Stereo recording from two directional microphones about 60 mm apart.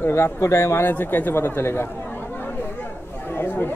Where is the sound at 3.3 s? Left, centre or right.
Left.